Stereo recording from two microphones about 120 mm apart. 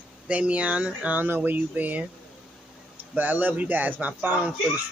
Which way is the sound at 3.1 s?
15° right (ahead or behind).